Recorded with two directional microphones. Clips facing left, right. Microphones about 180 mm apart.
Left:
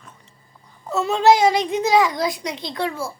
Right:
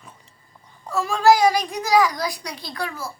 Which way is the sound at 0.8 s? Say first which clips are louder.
Left 1 dB; 25° left (ahead or behind).